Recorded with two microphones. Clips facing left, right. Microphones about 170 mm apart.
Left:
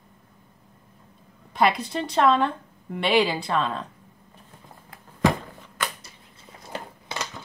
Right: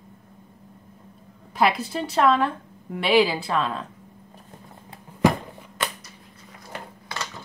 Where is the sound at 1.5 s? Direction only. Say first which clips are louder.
Even; 5° right (ahead or behind).